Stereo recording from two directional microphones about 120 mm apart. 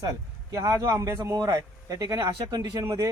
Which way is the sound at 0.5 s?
30° right (ahead or behind).